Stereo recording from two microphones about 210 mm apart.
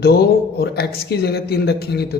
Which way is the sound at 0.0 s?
50° left (ahead or behind).